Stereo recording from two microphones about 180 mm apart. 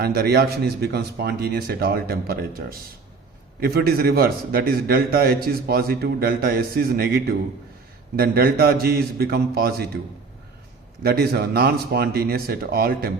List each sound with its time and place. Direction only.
0.0 s a man's voice: 60° right (ahead or behind)
11.0 s a man's voice: 60° right (ahead or behind)